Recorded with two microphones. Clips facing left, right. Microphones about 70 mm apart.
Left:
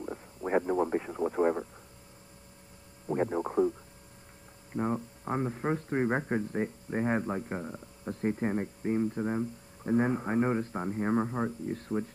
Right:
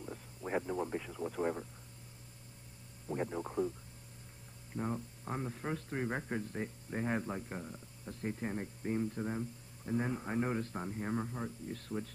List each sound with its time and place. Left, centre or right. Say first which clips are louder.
0.0 s speech: left 7 dB; left
3.1 s speech: left 8 dB; left
4.7 s speech: left 7 dB; left